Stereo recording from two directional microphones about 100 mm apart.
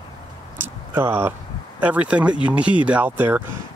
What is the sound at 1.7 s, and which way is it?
Speech, 15° right (ahead or behind).